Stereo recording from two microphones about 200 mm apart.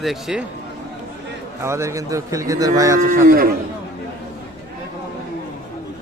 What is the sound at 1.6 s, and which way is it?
A man's voice, 15° right (ahead or behind).